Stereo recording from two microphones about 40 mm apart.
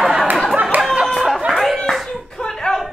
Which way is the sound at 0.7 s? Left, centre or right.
Right.